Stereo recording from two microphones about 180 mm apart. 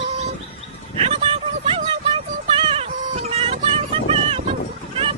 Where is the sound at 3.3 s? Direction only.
35° right (ahead or behind).